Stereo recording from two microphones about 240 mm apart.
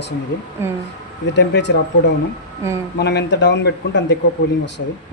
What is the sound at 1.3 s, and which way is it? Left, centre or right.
Speech, left.